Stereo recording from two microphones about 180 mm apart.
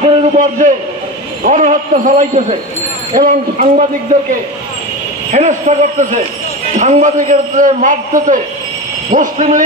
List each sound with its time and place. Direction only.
0.4 s a man's voice: 45° right (ahead or behind)
5.3 s a man's voice: 45° right (ahead or behind)